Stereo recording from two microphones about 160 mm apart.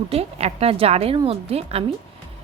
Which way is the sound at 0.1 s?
40° right (ahead or behind).